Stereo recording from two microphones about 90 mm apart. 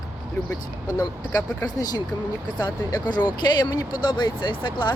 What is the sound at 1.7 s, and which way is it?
Speech, 45° left (ahead or behind).